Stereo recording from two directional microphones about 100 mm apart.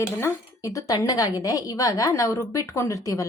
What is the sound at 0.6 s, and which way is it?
Speech, 35° left (ahead or behind).